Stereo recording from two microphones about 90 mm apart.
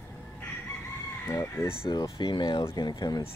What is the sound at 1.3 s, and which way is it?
Speech, 40° left (ahead or behind).